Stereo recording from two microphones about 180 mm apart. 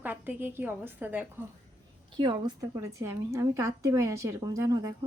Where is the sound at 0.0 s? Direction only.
10° right (ahead or behind).